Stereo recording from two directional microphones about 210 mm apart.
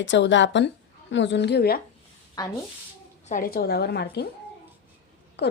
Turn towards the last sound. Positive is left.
turn(degrees=55)  # may be behind; listen again after turning